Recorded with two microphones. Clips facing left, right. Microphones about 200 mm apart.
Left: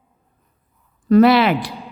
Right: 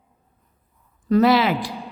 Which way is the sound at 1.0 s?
65° left (ahead or behind).